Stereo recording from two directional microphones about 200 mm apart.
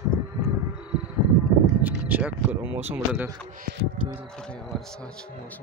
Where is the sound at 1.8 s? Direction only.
10° right (ahead or behind).